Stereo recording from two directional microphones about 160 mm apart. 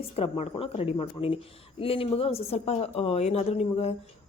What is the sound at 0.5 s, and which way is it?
A woman's voice, 40° left (ahead or behind).